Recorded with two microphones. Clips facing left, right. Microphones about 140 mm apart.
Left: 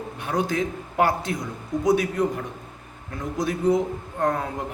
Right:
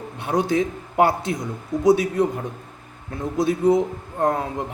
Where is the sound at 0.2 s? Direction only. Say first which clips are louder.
Right 4 dB; 25° right (ahead or behind).